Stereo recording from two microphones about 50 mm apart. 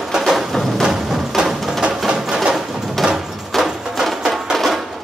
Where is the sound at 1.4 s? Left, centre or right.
Centre.